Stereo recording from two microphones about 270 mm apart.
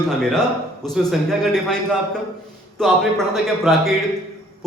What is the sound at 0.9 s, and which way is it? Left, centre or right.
Speech, centre.